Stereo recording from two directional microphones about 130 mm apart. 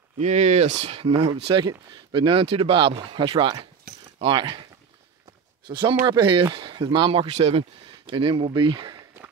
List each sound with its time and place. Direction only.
0.2 s speech: 65° right (ahead or behind)
1.6 s speech: 30° right (ahead or behind)
5.7 s speech: 35° right (ahead or behind)
8.1 s speech: 40° right (ahead or behind)